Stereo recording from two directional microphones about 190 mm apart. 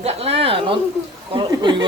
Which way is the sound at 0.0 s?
35° right (ahead or behind).